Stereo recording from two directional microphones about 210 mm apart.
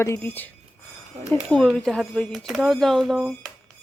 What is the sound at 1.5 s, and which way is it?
Speech, centre (ahead or behind).